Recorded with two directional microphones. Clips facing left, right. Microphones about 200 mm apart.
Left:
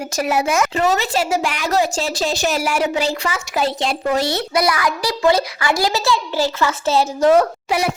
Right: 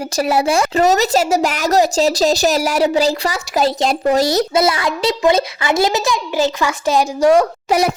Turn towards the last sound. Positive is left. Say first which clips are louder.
# right 4 dB
turn(degrees=-40)  # may be behind; listen again after turning